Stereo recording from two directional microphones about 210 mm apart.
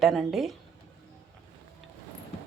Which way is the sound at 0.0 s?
Centre (ahead or behind).